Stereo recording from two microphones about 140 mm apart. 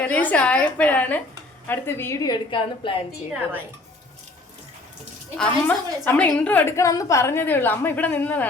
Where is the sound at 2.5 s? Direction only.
35° left (ahead or behind).